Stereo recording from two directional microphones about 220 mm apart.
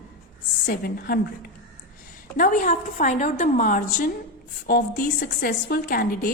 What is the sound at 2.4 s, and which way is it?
A woman's voice, 35° left (ahead or behind).